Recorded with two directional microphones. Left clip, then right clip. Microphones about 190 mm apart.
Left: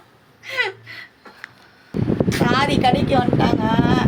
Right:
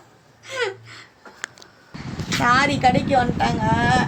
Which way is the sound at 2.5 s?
15° left (ahead or behind).